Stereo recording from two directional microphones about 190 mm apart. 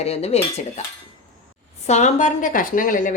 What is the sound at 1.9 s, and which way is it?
A woman's voice, 35° left (ahead or behind).